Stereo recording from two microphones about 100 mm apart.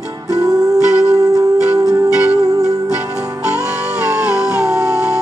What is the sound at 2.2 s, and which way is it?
Music, 10° right (ahead or behind).